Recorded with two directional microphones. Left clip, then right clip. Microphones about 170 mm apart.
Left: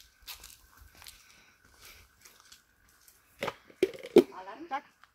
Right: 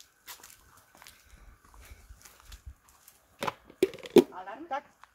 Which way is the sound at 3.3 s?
35° right (ahead or behind).